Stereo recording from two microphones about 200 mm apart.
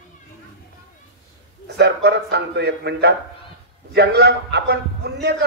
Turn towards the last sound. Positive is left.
turn(degrees=-55)  # may be behind; listen again after turning